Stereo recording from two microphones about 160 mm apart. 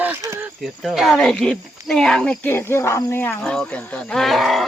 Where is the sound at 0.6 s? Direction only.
Centre (ahead or behind).